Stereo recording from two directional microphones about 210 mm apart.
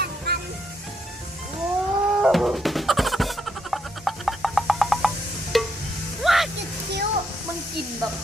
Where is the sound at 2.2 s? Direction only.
5° right (ahead or behind).